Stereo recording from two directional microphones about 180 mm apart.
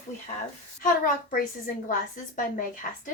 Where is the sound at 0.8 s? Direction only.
50° left (ahead or behind).